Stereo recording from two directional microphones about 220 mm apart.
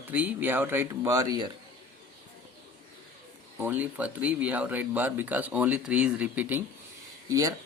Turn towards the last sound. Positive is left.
turn(degrees=-15)  # may be behind; listen again after turning